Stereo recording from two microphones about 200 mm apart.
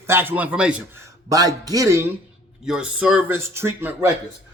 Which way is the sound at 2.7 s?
5° right (ahead or behind).